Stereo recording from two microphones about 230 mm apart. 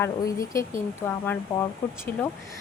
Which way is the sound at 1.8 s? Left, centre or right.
Centre.